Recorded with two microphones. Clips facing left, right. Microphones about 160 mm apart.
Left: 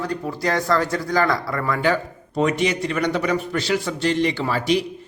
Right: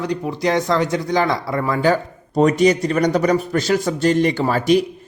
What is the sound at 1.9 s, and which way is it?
A man's voice, 40° right (ahead or behind).